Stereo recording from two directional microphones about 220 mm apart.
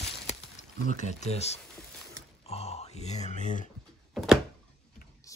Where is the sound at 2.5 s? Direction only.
30° left (ahead or behind).